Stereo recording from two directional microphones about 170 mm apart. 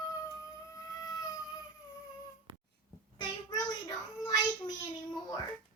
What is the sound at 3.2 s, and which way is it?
Child singing, 25° left (ahead or behind).